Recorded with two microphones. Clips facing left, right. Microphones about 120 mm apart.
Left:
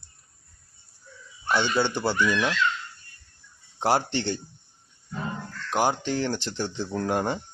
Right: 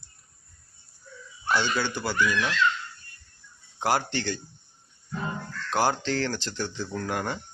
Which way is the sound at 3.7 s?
25° left (ahead or behind).